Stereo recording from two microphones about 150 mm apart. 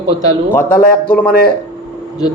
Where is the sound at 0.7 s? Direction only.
75° left (ahead or behind).